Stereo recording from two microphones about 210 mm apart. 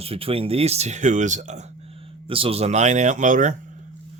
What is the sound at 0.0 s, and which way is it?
Speech, 25° right (ahead or behind).